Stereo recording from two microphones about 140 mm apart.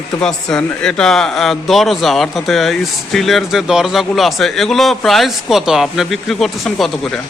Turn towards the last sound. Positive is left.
turn(degrees=0)  # may be behind; listen again after turning